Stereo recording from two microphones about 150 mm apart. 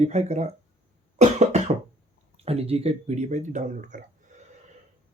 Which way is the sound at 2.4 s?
40° right (ahead or behind).